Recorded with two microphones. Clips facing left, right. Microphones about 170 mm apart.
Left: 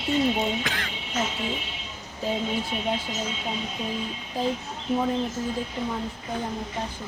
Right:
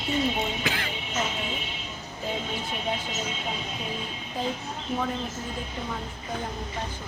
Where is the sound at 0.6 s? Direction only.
5° right (ahead or behind).